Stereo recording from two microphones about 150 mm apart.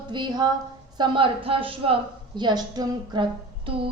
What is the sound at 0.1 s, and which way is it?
A woman's voice, 30° right (ahead or behind).